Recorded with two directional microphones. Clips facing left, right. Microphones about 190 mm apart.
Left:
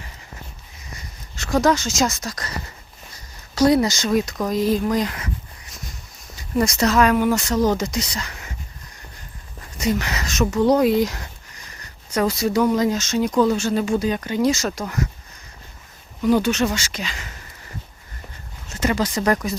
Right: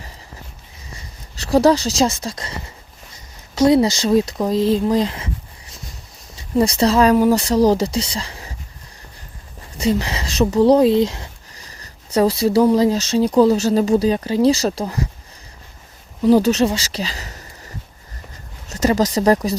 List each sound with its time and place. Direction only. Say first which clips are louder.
1.4 s speech: right 5 dB; 35° right (ahead or behind)
9.7 s speech: right 3 dB; 30° right (ahead or behind)
16.2 s speech: right 5 dB; 35° right (ahead or behind)
18.7 s speech: right 5 dB; 40° right (ahead or behind)